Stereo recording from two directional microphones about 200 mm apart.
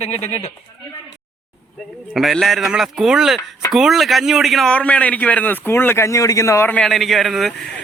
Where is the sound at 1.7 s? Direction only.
Centre (ahead or behind).